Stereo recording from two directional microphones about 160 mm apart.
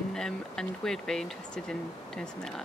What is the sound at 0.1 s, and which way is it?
Speech, 5° left (ahead or behind).